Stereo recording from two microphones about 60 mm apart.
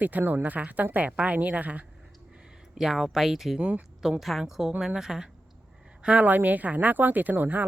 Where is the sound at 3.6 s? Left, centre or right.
Centre.